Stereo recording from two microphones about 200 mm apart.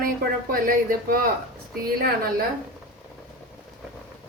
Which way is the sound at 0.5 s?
45° right (ahead or behind).